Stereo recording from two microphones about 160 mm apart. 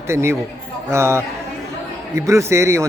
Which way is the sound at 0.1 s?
15° right (ahead or behind).